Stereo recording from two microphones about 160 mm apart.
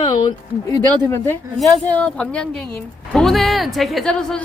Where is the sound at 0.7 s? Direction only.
15° left (ahead or behind).